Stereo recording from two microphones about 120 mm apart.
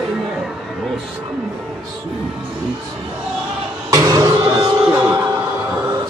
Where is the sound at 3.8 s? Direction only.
30° right (ahead or behind).